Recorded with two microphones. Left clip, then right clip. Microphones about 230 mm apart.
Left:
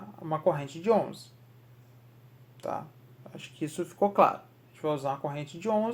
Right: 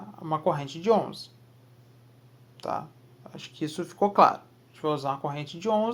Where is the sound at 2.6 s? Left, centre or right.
Right.